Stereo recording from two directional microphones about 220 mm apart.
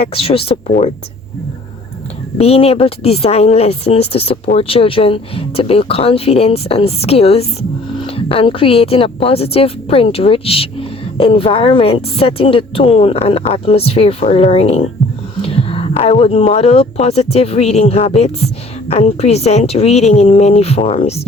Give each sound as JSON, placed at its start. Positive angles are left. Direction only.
{"t": 0.0, "sound": "speech", "side_deg": 25}
{"t": 2.4, "sound": "speech", "side_deg": 25}